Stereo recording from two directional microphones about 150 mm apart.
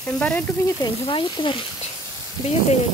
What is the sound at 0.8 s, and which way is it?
Speech, 35° left (ahead or behind).